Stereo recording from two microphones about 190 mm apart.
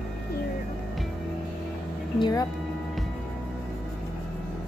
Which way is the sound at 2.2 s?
20° left (ahead or behind).